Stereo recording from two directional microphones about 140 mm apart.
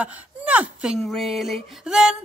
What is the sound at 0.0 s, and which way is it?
Speech, 10° right (ahead or behind).